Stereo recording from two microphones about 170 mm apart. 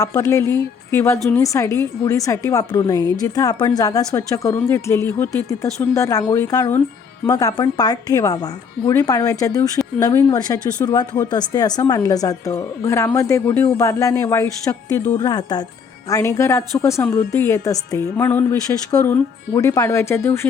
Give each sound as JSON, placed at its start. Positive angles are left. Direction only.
{"t": 0.0, "sound": "a woman's voice", "side_deg": 20}